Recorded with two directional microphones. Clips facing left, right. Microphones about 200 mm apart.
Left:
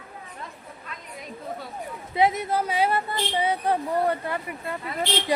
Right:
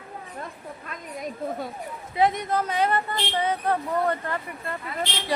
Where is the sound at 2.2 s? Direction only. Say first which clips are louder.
Even; 5° left (ahead or behind).